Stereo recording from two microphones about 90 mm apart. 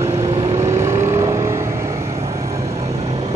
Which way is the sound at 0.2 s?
35° right (ahead or behind).